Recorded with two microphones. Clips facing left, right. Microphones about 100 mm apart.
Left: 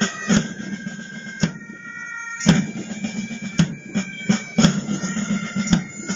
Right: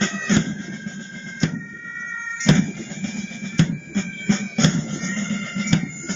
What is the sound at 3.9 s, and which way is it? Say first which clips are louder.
Music: left 2 dB; 40° left (ahead or behind).